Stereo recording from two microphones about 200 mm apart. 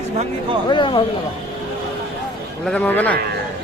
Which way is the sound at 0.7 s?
25° left (ahead or behind).